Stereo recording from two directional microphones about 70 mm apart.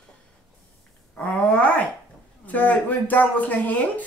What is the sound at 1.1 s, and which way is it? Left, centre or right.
Speech, left.